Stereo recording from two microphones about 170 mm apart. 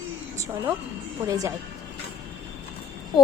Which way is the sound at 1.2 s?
20° right (ahead or behind).